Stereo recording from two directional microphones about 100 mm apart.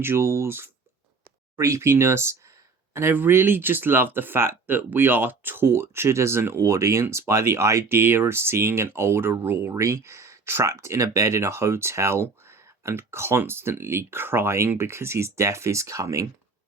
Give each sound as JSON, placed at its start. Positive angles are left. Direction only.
{"t": 0.0, "sound": "speech", "side_deg": -25}